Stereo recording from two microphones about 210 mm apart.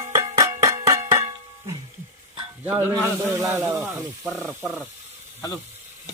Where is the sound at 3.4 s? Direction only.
10° right (ahead or behind).